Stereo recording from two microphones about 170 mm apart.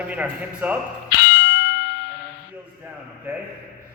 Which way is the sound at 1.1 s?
85° left.